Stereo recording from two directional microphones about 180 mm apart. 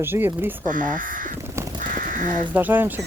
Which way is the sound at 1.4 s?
15° right (ahead or behind).